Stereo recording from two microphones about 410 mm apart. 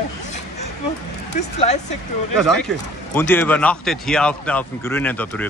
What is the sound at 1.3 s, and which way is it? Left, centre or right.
Speech, centre.